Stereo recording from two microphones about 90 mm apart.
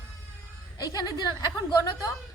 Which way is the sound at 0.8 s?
40° left (ahead or behind).